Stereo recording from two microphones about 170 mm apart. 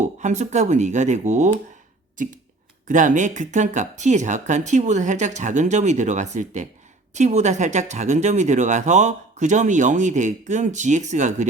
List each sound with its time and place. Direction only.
0.0 s speech: 45° right (ahead or behind)